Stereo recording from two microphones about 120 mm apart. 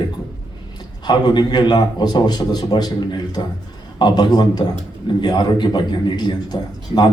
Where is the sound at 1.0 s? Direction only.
35° left (ahead or behind).